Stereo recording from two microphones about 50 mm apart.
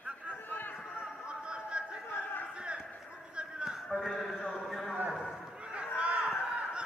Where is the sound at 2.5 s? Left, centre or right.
Centre.